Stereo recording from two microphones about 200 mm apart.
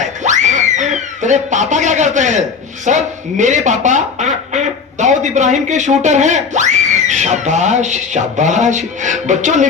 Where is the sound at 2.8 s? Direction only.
40° right (ahead or behind).